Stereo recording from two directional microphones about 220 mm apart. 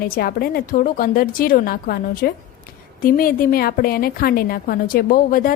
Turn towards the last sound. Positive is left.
turn(degrees=40)  # may be behind; listen again after turning